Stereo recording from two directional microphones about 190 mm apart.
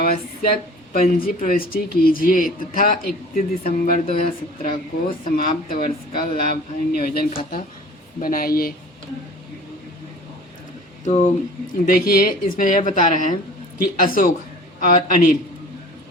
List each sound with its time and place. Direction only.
0.0 s speech: 55° left (ahead or behind)
11.0 s speech: 40° left (ahead or behind)
11.9 s a man's voice: 50° left (ahead or behind)